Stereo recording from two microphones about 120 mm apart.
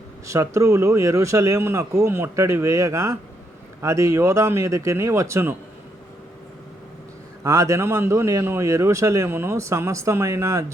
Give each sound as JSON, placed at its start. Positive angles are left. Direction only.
{"t": 0.3, "sound": "speech", "side_deg": -25}
{"t": 7.4, "sound": "speech", "side_deg": -25}